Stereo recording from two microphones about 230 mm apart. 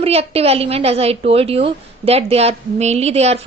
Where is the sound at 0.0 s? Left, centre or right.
Right.